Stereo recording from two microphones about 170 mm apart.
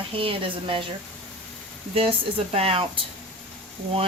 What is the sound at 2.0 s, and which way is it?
Speech, 35° right (ahead or behind).